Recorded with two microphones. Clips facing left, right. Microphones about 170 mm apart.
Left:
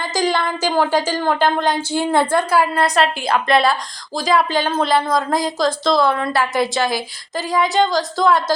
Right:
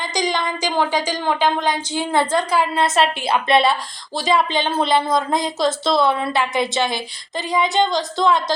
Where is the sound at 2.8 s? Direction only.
Centre (ahead or behind).